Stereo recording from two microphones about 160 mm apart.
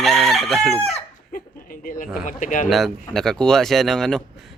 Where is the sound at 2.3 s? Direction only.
55° left (ahead or behind).